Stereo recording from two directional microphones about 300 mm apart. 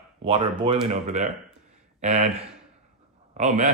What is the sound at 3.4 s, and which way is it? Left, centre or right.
Speech, right.